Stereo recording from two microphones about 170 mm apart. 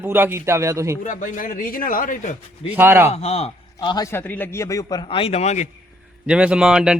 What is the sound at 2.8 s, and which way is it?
Speech, 15° right (ahead or behind).